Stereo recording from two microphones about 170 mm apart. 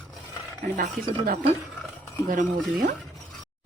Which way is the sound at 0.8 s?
55° right (ahead or behind).